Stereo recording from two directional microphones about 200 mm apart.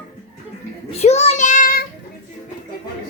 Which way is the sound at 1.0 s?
35° left (ahead or behind).